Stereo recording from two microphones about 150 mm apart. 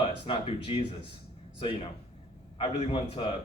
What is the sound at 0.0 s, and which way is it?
Speech, 35° left (ahead or behind).